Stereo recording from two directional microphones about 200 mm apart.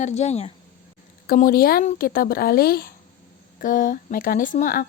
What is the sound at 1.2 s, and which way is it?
Speech, 45° left (ahead or behind).